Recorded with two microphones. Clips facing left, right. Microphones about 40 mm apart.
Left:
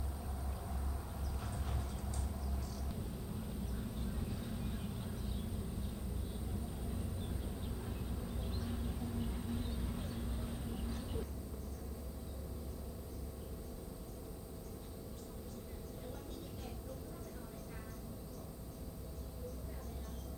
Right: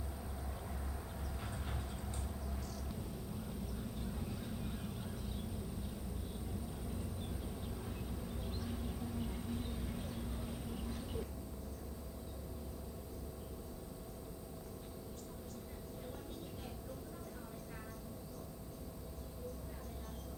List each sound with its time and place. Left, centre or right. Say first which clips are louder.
1.4 s vehicle: left 1 dB; right
4.2 s vehicle: left 1 dB; centre
7.2 s vehicle: even; centre